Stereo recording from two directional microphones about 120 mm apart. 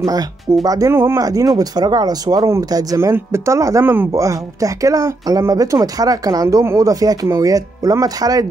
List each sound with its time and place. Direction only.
0.7 s speech: 25° right (ahead or behind)